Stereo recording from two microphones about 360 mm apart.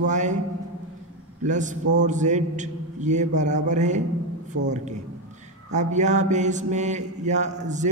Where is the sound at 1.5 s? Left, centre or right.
Right.